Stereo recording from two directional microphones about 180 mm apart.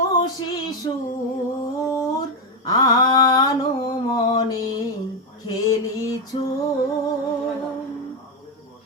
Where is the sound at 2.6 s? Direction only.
20° left (ahead or behind).